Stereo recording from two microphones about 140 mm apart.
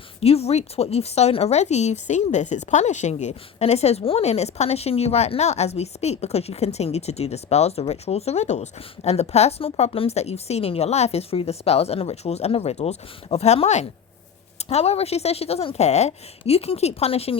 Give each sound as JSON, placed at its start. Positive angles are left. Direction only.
{"t": 0.2, "sound": "speech", "side_deg": 45}